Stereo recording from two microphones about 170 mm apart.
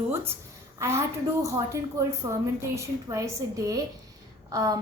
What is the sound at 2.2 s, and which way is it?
A woman's voice, 25° right (ahead or behind).